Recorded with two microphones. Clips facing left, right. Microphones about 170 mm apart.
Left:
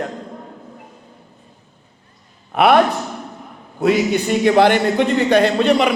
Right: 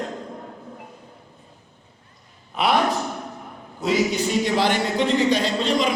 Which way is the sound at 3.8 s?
60° left (ahead or behind).